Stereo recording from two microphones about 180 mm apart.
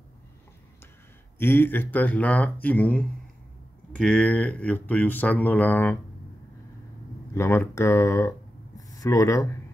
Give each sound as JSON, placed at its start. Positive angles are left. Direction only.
{"t": 1.4, "sound": "speech", "side_deg": 10}
{"t": 7.3, "sound": "speech", "side_deg": 15}